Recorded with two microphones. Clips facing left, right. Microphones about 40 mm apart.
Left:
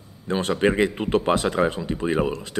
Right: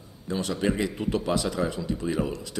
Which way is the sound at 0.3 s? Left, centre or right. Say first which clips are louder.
Left 6 dB; left.